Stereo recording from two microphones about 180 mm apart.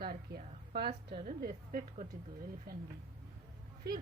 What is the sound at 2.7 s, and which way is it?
Speech, 55° right (ahead or behind).